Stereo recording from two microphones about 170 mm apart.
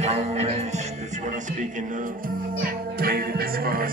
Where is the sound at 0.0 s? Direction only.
40° right (ahead or behind).